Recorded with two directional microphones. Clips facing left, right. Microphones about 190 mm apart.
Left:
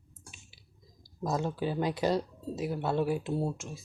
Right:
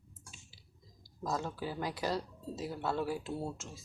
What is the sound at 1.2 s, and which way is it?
Speech, 20° left (ahead or behind).